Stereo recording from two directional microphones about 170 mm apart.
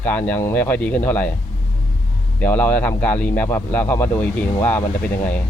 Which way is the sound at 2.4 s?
10° left (ahead or behind).